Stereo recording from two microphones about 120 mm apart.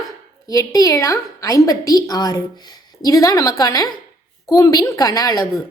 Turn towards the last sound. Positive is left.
turn(degrees=30)  # may be behind; listen again after turning